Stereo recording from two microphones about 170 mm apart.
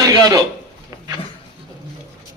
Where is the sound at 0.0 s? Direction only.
20° right (ahead or behind).